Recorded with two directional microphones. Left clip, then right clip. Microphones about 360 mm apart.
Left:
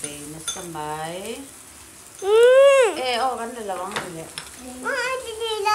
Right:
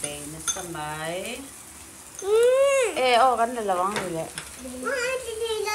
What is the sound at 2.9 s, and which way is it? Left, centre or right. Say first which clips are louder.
Speech: right 4 dB; centre.